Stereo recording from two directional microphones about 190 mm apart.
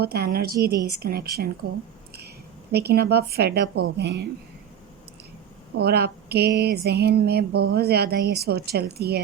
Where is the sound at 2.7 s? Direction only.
55° right (ahead or behind).